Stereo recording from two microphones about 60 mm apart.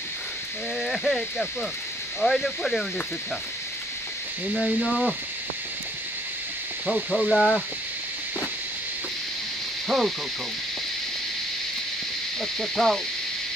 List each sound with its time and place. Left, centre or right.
0.7 s speech: centre
4.8 s speech: centre
6.9 s speech: centre
9.8 s owl: centre
12.4 s speech: centre